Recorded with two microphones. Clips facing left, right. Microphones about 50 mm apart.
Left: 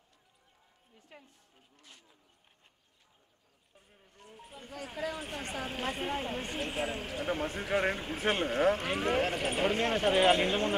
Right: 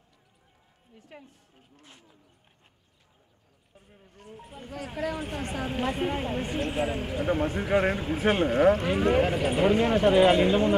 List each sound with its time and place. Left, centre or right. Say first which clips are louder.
1.8 s speech: right 4 dB; centre
3.7 s speech: right 6 dB; centre